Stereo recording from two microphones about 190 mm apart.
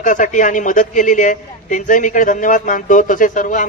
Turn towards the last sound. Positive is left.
turn(degrees=40)  # may be behind; listen again after turning